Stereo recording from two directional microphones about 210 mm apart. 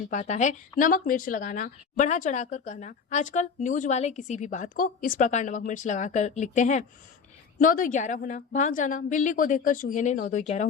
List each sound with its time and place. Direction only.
0.1 s a woman's voice: 35° left (ahead or behind)